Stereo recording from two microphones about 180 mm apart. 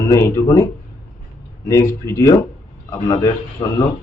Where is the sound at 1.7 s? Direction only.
15° left (ahead or behind).